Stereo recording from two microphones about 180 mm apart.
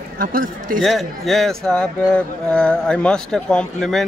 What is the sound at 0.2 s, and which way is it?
Speech, 50° right (ahead or behind).